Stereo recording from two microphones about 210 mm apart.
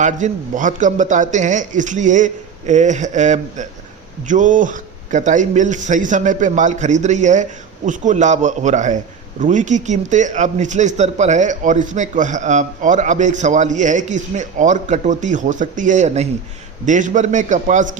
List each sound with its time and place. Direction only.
0.0 s speech: 35° right (ahead or behind)